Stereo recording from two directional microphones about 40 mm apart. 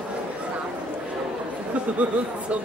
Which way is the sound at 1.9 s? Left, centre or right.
Right.